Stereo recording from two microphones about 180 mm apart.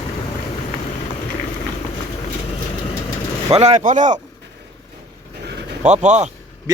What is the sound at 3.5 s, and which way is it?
Speech, 35° right (ahead or behind).